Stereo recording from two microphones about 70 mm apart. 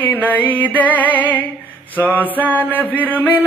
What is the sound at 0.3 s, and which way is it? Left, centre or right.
Music, left.